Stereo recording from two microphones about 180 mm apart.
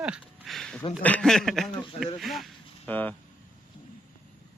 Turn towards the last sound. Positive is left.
turn(degrees=10)  # may be behind; listen again after turning